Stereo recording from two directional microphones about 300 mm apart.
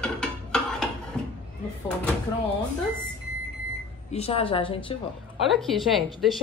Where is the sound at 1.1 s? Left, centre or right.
Centre.